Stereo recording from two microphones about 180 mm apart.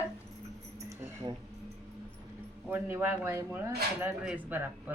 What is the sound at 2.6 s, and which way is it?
Speech, 10° right (ahead or behind).